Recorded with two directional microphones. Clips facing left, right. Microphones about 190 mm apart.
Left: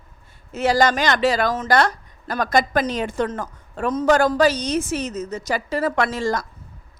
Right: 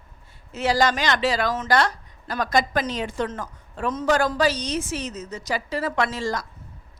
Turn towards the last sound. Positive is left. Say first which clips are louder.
# left 3 dB
turn(degrees=50)  # may be behind; listen again after turning